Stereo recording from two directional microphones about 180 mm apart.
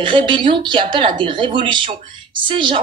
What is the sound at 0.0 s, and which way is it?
Speech, 25° right (ahead or behind).